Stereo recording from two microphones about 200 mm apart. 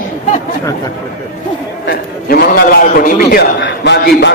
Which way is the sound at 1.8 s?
50° left (ahead or behind).